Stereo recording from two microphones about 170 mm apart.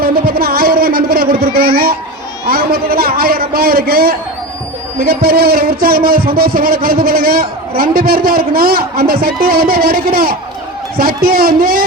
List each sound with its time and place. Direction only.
0.0 s a man's voice: 60° right (ahead or behind)